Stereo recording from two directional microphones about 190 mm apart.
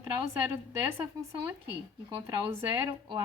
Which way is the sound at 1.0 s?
15° right (ahead or behind).